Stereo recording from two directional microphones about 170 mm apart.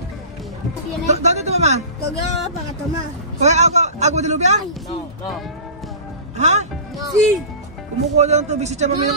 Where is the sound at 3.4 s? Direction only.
40° right (ahead or behind).